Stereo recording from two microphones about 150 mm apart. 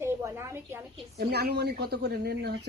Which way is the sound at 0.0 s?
15° right (ahead or behind).